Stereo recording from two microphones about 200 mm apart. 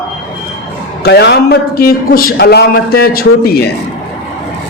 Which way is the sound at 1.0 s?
55° left (ahead or behind).